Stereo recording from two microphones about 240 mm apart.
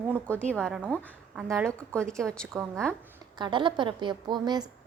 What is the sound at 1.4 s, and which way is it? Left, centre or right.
Speech, centre.